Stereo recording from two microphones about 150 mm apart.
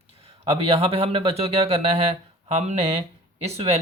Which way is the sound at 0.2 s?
40° right (ahead or behind).